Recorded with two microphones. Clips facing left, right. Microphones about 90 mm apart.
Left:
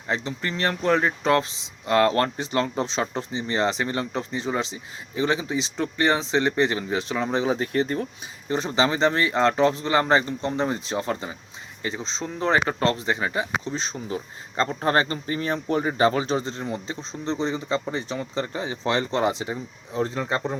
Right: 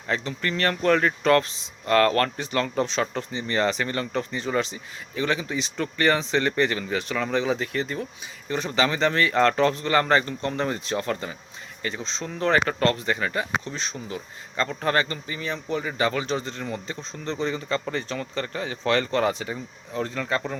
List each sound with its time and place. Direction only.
0.1 s speech: 25° left (ahead or behind); by 8.0 s 50° left (ahead or behind)
8.4 s speech: 30° left (ahead or behind)
13.7 s speech: 30° left (ahead or behind)